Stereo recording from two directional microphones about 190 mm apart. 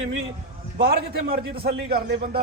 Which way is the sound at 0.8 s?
55° right (ahead or behind).